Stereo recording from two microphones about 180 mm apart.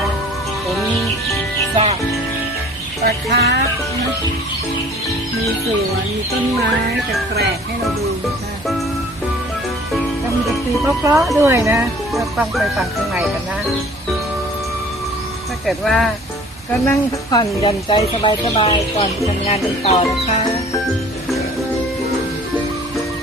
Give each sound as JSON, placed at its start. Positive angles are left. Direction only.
{"t": 1.7, "sound": "music", "side_deg": -35}
{"t": 3.0, "sound": "speech", "side_deg": -60}
{"t": 11.0, "sound": "a woman's voice", "side_deg": -15}
{"t": 12.1, "sound": "speech", "side_deg": 0}
{"t": 15.6, "sound": "speech", "side_deg": 0}
{"t": 16.8, "sound": "a woman's voice", "side_deg": 15}
{"t": 17.6, "sound": "speech", "side_deg": 30}